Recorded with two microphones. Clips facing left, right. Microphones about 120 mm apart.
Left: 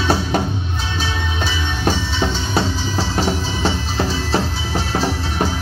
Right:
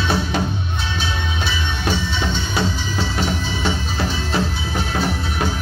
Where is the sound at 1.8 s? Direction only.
35° left (ahead or behind).